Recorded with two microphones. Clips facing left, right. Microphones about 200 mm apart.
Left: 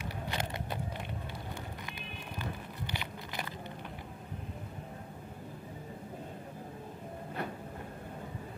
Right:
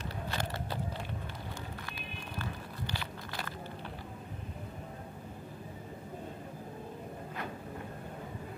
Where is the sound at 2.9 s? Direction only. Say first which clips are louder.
Even; 15° left (ahead or behind).